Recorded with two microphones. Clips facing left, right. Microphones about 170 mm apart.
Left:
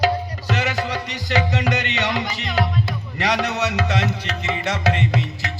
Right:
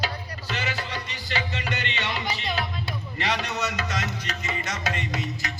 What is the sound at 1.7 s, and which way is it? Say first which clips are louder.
Music: left 7 dB; 75° left (ahead or behind).